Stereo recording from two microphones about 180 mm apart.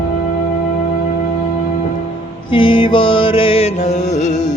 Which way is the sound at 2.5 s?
30° left (ahead or behind).